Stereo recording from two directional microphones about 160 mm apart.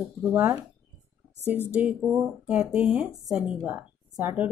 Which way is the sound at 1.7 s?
10° right (ahead or behind).